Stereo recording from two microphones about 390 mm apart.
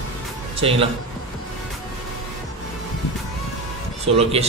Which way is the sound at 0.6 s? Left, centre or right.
Centre.